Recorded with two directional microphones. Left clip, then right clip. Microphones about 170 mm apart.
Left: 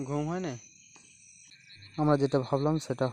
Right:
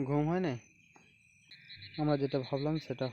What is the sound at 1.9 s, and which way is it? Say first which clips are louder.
Speech: left 6 dB; 30° left (ahead or behind).